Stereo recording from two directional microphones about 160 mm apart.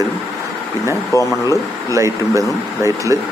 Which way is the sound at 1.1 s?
20° left (ahead or behind).